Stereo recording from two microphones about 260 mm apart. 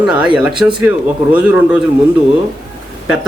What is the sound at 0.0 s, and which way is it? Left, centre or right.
Speech, centre.